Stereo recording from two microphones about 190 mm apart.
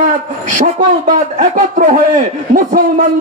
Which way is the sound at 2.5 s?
45° right (ahead or behind).